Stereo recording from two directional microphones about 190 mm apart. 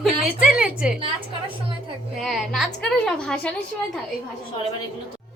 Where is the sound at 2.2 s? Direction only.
Centre (ahead or behind).